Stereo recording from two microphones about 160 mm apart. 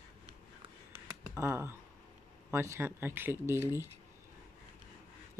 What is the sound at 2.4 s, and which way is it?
Speech, 15° right (ahead or behind).